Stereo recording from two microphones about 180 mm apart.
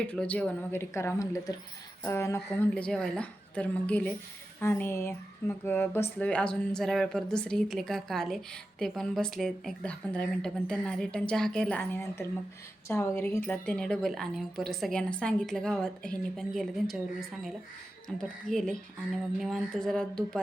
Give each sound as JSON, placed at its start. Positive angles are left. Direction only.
{"t": 0.0, "sound": "a woman's voice", "side_deg": 5}